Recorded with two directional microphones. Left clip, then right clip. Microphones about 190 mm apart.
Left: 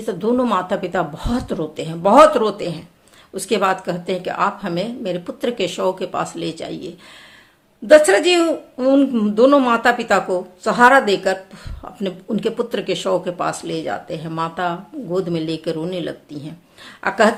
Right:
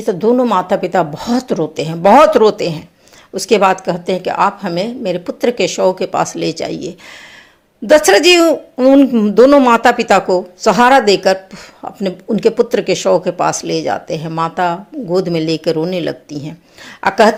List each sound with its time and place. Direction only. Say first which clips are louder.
0.0 s a woman's voice: right 7 dB; 25° right (ahead or behind)